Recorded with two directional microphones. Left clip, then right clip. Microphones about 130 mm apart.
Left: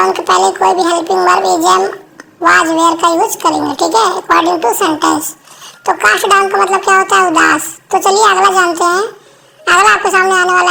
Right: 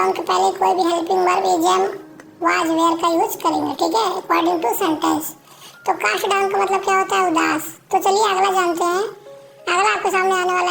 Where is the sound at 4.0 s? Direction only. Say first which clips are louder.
Left 8 dB; 10° left (ahead or behind).